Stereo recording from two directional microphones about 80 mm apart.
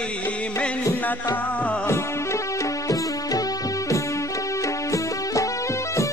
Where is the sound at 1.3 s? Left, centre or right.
Centre.